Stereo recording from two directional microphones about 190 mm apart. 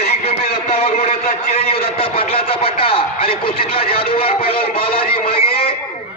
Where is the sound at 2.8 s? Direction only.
30° left (ahead or behind).